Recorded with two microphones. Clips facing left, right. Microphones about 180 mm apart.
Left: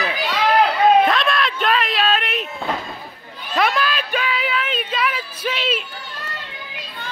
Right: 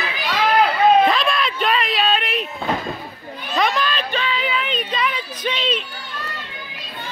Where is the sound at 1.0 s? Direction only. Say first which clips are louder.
Even; centre (ahead or behind).